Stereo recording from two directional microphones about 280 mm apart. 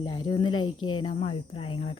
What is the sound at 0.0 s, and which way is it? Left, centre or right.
Speech, centre.